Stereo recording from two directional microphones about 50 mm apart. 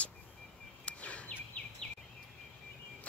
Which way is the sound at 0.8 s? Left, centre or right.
Left.